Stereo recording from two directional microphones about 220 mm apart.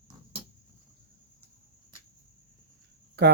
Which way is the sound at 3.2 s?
50° right (ahead or behind).